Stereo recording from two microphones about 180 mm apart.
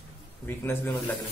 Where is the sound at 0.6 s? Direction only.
10° left (ahead or behind).